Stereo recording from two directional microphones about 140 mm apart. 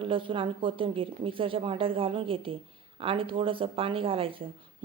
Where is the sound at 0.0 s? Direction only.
40° right (ahead or behind).